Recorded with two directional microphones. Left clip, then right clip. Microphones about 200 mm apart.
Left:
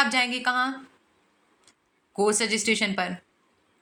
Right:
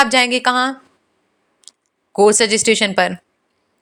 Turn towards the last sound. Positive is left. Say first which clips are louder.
# right 11 dB
turn(degrees=-40)  # may be behind; listen again after turning